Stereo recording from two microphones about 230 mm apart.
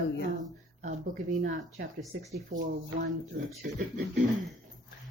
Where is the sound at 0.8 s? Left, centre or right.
Right.